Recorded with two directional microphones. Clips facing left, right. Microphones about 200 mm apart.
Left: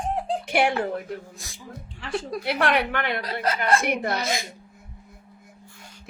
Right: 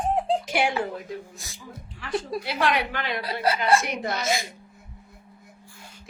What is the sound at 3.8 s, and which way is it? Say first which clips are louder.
Speech: left 4 dB; 60° left (ahead or behind).